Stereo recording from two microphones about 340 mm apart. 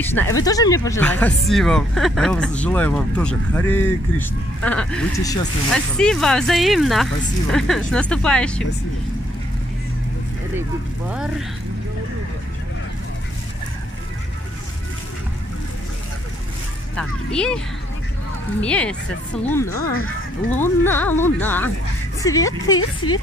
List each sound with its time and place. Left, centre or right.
0.0 s speech: centre
11.1 s speech: centre
16.9 s speech: centre
18.6 s a woman's voice: centre
19.8 s speech: left
20.5 s a woman's voice: centre